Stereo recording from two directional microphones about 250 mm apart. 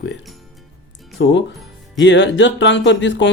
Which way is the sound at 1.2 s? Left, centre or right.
Left.